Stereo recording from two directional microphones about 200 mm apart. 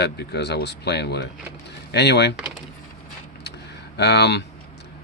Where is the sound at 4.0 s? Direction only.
55° left (ahead or behind).